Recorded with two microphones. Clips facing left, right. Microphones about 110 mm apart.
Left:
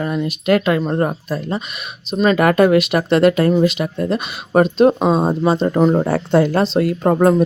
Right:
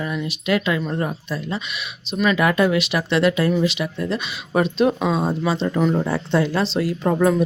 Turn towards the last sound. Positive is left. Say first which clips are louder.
# left 4 dB
turn(degrees=50)  # may be behind; listen again after turning